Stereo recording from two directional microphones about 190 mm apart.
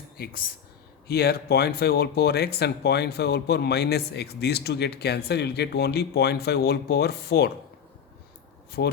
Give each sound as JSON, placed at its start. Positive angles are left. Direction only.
{"t": 1.0, "sound": "speech", "side_deg": 55}
{"t": 8.8, "sound": "speech", "side_deg": 60}